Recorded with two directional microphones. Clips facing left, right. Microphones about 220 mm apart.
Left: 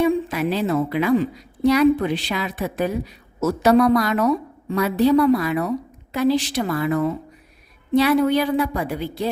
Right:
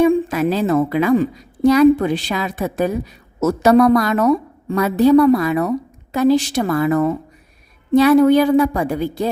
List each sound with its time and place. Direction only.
0.0 s a woman's voice: 45° right (ahead or behind)